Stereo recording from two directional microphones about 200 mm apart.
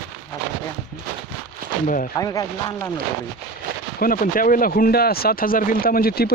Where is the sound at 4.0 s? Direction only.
45° left (ahead or behind).